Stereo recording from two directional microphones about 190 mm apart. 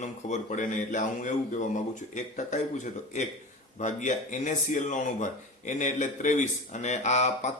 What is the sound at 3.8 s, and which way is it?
Speech, 40° left (ahead or behind).